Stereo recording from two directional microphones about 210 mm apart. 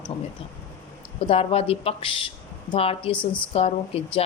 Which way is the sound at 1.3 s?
25° left (ahead or behind).